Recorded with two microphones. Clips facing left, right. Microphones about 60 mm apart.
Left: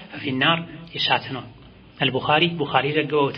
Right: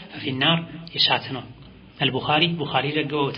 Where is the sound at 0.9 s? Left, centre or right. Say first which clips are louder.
Left 1 dB; centre.